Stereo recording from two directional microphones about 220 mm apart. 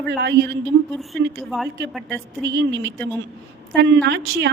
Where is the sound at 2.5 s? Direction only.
55° right (ahead or behind).